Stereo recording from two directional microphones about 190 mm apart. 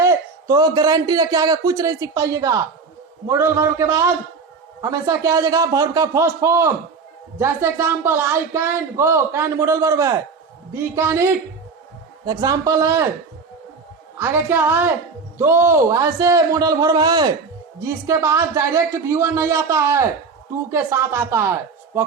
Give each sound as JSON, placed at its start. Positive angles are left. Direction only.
{"t": 0.0, "sound": "a man's voice", "side_deg": -15}
{"t": 14.2, "sound": "speech", "side_deg": -10}